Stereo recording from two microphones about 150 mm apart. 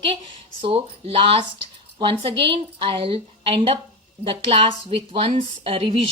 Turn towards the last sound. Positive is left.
turn(degrees=-40)  # may be behind; listen again after turning